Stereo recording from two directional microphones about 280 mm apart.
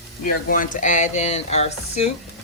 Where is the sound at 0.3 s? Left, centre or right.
Left.